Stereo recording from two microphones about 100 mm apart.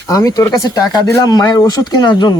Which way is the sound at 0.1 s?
35° left (ahead or behind).